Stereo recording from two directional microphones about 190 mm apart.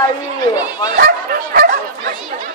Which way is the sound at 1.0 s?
50° right (ahead or behind).